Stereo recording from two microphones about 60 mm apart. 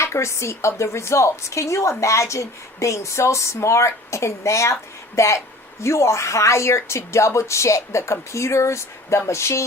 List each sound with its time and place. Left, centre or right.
0.0 s a woman's voice: left